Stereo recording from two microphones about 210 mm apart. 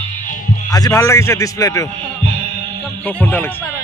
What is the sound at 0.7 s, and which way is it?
A man's voice, 20° left (ahead or behind).